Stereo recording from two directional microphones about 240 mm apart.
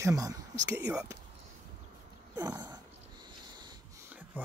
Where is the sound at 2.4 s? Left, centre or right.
Centre.